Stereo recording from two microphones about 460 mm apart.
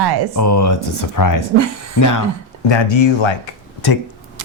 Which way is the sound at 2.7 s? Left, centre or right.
Left.